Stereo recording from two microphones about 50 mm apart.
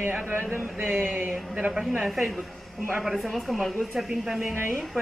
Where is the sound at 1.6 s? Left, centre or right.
Right.